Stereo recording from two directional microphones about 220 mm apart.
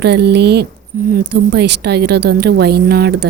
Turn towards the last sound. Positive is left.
turn(degrees=-45)  # may be behind; listen again after turning